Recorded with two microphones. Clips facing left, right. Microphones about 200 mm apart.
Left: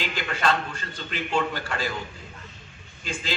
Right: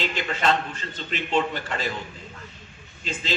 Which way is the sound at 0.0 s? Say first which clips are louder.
Right 2 dB; 20° right (ahead or behind).